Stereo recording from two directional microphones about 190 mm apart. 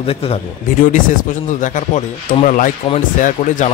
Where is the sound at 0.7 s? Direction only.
45° left (ahead or behind).